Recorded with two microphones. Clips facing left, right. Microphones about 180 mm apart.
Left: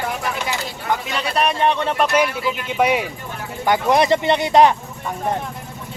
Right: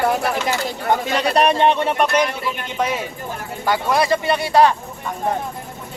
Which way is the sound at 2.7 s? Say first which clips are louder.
Left 5 dB; 15° left (ahead or behind).